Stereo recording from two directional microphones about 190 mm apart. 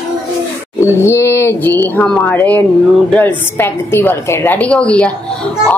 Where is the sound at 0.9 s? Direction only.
15° left (ahead or behind).